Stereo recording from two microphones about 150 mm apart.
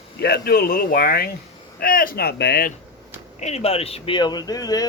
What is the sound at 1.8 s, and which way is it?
Speech, 75° left (ahead or behind).